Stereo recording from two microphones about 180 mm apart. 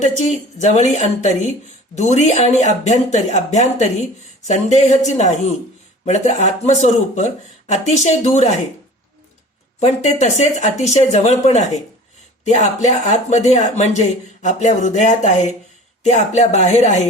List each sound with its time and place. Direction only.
0.0 s speech: 40° left (ahead or behind)
9.8 s speech: 40° left (ahead or behind)